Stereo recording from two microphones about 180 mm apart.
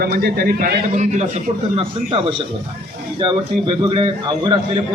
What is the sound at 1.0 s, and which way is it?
A man's voice, 40° right (ahead or behind).